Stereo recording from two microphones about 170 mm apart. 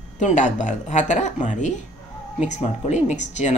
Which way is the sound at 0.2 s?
45° left (ahead or behind).